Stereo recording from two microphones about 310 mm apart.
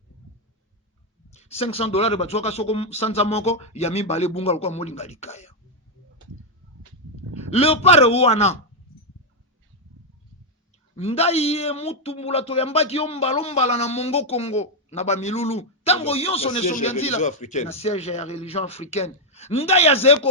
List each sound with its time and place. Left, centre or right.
1.3 s speech: centre
7.3 s speech: centre
10.9 s speech: centre